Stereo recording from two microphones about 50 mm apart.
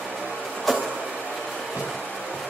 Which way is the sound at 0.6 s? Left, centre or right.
Centre.